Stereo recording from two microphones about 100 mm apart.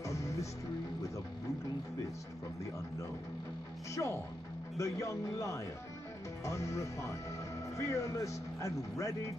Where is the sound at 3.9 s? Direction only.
30° left (ahead or behind).